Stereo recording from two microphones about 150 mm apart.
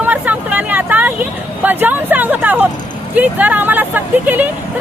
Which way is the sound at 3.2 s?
10° right (ahead or behind).